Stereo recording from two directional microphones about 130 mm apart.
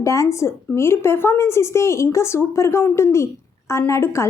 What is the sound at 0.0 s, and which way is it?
A woman's voice, 25° left (ahead or behind).